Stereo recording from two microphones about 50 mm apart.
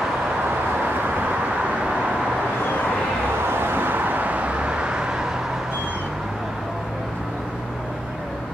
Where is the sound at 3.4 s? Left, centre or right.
Right; by 5.4 s centre.